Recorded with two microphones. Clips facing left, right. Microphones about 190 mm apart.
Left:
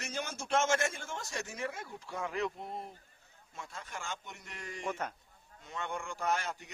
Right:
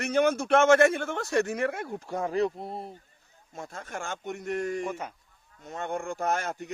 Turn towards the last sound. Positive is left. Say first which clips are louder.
# right 5 dB
turn(degrees=-50)  # may be behind; listen again after turning